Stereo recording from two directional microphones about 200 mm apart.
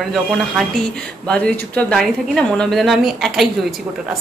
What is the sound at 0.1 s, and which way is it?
A woman's voice, centre (ahead or behind).